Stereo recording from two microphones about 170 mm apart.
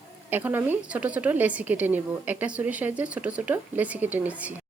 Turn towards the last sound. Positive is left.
turn(degrees=-10)  # may be behind; listen again after turning